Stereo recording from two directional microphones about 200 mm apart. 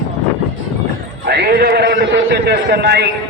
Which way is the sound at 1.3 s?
50° right (ahead or behind).